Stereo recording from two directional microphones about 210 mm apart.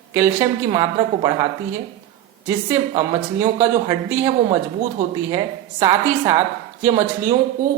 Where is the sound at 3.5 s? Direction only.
10° right (ahead or behind).